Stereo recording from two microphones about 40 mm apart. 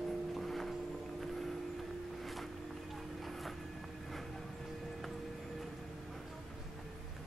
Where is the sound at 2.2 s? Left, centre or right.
Centre.